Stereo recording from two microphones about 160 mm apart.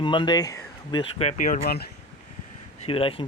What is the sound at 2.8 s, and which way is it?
Speech, 35° left (ahead or behind).